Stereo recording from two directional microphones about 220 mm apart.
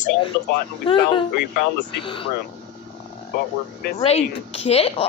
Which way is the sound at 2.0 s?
25° left (ahead or behind).